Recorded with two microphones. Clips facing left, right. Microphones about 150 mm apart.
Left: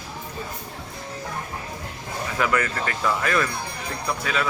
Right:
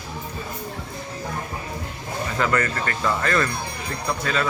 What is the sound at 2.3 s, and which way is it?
Speech, 10° left (ahead or behind).